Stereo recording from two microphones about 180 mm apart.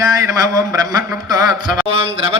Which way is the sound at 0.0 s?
15° right (ahead or behind).